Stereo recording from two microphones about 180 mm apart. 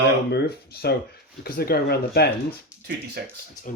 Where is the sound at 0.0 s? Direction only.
60° left (ahead or behind).